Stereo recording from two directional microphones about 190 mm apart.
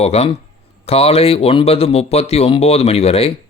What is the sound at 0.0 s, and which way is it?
Speech, 35° left (ahead or behind).